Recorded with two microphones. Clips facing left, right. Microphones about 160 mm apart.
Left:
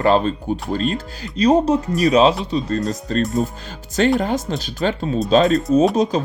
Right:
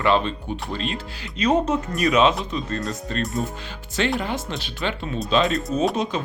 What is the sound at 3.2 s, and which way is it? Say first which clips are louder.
Speech: left 6 dB; centre (ahead or behind).